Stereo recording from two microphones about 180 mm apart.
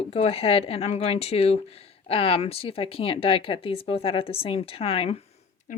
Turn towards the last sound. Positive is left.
turn(degrees=35)  # may be behind; listen again after turning